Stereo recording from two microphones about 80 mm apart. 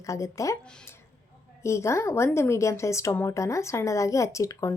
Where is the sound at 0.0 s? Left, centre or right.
Left.